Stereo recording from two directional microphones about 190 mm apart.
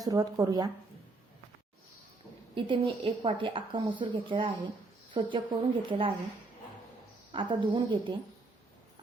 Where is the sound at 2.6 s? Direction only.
25° right (ahead or behind).